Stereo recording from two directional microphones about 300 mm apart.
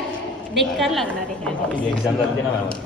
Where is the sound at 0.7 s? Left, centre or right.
Centre.